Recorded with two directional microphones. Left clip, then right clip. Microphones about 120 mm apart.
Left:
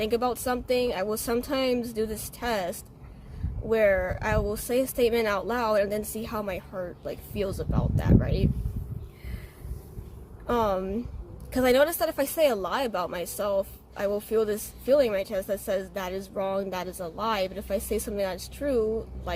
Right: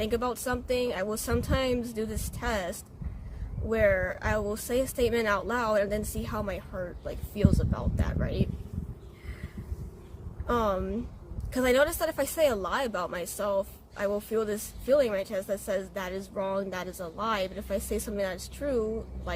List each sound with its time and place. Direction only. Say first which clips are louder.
0.0 s a woman's voice: left 3 dB; 40° left (ahead or behind)
10.4 s a woman's voice: left 2 dB; 40° left (ahead or behind)